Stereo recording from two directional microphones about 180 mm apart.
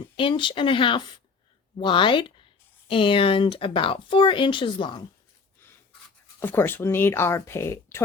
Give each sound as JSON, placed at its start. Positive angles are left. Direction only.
{"t": 0.2, "sound": "speech", "side_deg": 30}
{"t": 6.4, "sound": "speech", "side_deg": 10}